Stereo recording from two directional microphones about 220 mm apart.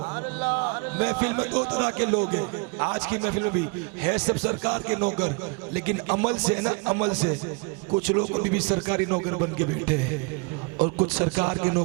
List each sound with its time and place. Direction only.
0.3 s a man's voice: 20° right (ahead or behind)
4.3 s a man's voice: 20° right (ahead or behind)
6.4 s a man's voice: 20° right (ahead or behind)